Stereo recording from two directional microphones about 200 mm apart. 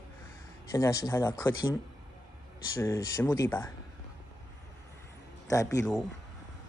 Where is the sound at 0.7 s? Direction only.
15° left (ahead or behind).